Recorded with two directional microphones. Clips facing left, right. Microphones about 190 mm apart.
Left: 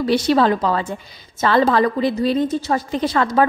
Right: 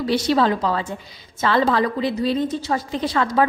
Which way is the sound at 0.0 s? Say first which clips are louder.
Left 3 dB; 55° left (ahead or behind).